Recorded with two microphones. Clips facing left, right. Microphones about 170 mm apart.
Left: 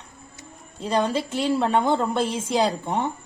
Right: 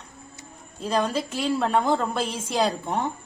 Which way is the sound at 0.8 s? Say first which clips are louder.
Left 2 dB; centre (ahead or behind).